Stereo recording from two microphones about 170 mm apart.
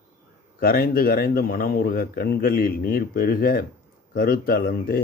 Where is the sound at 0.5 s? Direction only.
60° left (ahead or behind).